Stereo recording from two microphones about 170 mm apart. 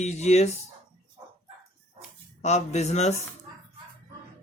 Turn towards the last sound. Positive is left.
turn(degrees=40)  # may be behind; listen again after turning